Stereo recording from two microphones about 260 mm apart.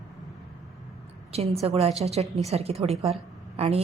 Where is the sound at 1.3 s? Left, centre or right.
Right.